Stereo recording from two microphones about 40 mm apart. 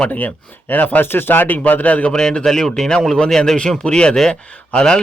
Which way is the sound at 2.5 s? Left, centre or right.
Centre.